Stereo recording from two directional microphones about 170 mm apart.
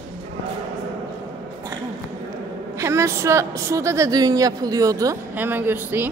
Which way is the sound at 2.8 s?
15° right (ahead or behind).